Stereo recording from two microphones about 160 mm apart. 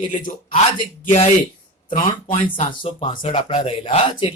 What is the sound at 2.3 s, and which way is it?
Speech, 35° left (ahead or behind).